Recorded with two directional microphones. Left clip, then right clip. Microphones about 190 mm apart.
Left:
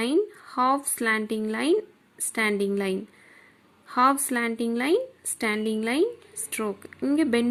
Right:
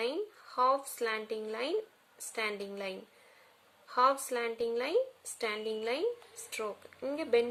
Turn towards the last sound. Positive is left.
turn(degrees=30)  # may be behind; listen again after turning